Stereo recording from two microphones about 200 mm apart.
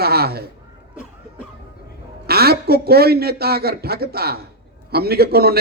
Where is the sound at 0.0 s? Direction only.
50° right (ahead or behind).